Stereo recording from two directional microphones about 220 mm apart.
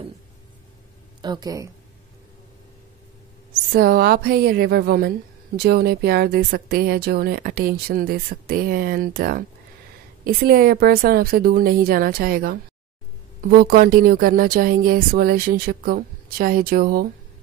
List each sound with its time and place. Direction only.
1.2 s speech: 20° right (ahead or behind)
3.7 s speech: 45° right (ahead or behind)